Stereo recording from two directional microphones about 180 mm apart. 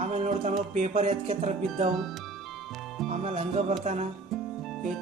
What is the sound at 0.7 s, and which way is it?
Music, 40° right (ahead or behind).